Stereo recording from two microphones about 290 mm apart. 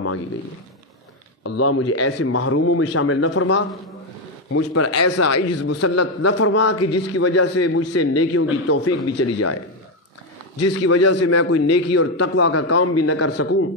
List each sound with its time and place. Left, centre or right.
1.4 s a man's voice: left
10.6 s a man's voice: left